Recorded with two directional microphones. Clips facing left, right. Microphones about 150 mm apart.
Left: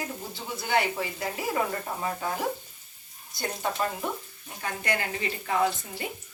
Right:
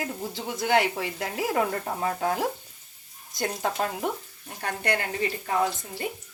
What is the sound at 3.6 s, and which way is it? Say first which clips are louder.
Speech: right 1 dB; 90° right.